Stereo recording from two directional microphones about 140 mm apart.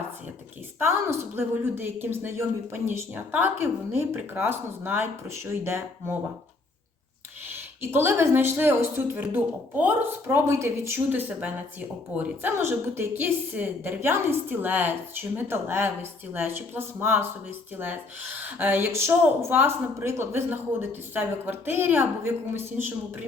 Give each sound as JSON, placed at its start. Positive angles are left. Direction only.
{"t": 0.8, "sound": "speech", "side_deg": -15}
{"t": 7.5, "sound": "speech", "side_deg": -15}
{"t": 18.3, "sound": "speech", "side_deg": -15}